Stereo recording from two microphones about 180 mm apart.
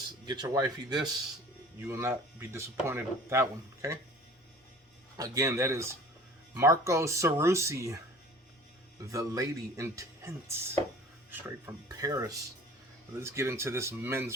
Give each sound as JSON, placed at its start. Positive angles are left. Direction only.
{"t": 0.3, "sound": "speech", "side_deg": -20}
{"t": 5.1, "sound": "speech", "side_deg": -20}
{"t": 9.0, "sound": "speech", "side_deg": -20}